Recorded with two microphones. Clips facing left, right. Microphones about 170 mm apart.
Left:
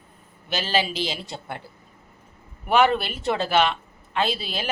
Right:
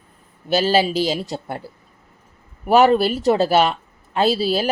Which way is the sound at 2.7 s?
40° right (ahead or behind).